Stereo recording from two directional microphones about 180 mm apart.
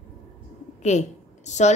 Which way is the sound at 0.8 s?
40° left (ahead or behind).